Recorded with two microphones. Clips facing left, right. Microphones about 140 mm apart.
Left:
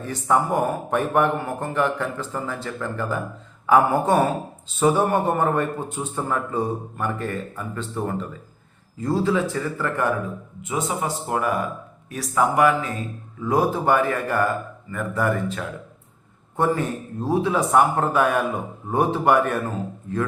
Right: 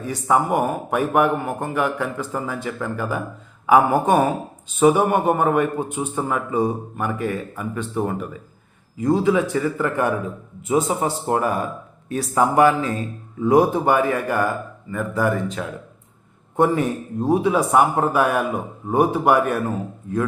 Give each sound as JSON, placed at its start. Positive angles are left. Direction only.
{"t": 0.0, "sound": "a man's voice", "side_deg": -10}
{"t": 10.8, "sound": "a man's voice", "side_deg": -30}